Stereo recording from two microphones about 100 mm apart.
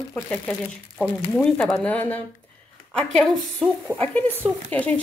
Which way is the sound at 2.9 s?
5° left (ahead or behind).